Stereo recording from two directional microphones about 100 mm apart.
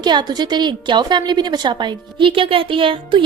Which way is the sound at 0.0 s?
45° right (ahead or behind).